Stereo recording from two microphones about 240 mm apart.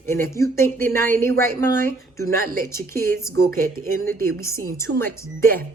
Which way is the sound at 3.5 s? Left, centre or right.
Right.